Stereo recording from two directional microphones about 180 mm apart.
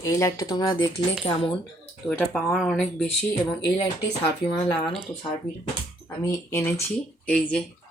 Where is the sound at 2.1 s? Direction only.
Centre (ahead or behind).